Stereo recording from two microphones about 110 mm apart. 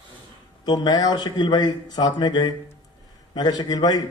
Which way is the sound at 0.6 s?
40° left (ahead or behind).